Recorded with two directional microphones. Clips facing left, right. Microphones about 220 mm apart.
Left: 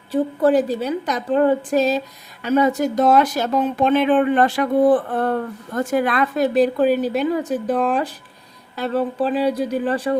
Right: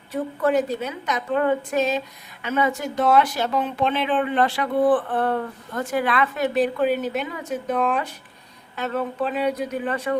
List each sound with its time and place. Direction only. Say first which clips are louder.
0.1 s speech: left 5 dB; 30° left (ahead or behind)